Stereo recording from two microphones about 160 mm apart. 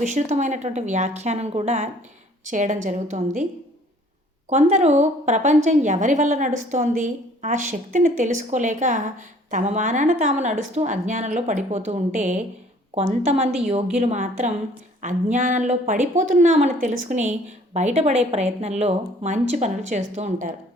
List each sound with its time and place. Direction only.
0.0 s a woman's voice: 50° right (ahead or behind)
4.4 s a woman's voice: 45° right (ahead or behind)